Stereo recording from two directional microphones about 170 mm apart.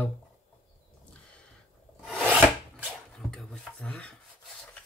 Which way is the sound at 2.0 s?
5° left (ahead or behind).